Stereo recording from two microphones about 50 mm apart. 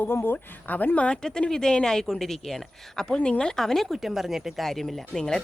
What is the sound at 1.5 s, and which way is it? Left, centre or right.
Speech, centre.